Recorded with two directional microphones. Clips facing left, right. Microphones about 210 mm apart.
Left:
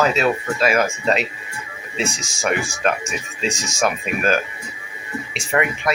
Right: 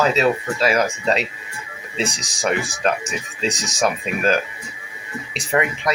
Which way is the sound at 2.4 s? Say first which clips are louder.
Even; 35° right (ahead or behind).